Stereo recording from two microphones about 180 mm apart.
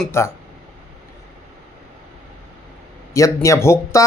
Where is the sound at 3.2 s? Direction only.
15° left (ahead or behind).